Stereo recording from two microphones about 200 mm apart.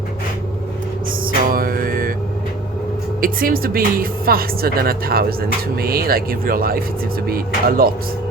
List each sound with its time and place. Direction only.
1.2 s music: 45° right (ahead or behind)
3.2 s speech: 45° right (ahead or behind)